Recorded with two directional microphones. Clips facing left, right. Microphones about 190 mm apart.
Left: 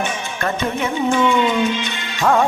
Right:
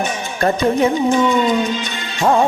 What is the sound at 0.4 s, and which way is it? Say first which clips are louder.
Music: right 7 dB; 35° right (ahead or behind).